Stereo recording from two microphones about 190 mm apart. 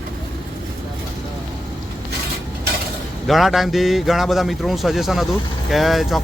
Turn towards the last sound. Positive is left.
turn(degrees=0)  # may be behind; listen again after turning